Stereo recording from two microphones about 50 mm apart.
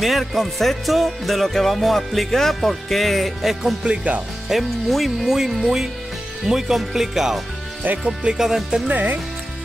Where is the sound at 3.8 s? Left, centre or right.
Right.